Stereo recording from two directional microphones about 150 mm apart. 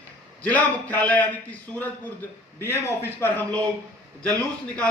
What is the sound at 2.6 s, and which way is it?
A man's voice, 15° left (ahead or behind).